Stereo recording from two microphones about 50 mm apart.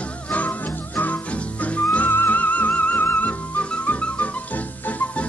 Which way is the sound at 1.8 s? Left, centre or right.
Left.